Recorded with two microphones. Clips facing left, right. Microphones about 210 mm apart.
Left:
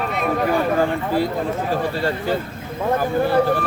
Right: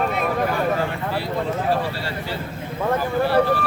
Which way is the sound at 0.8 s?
45° left (ahead or behind).